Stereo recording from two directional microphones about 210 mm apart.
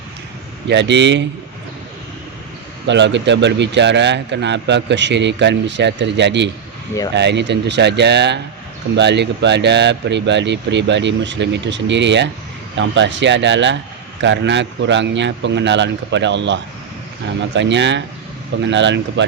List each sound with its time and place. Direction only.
0.7 s speech: 55° right (ahead or behind)
2.8 s speech: 60° right (ahead or behind)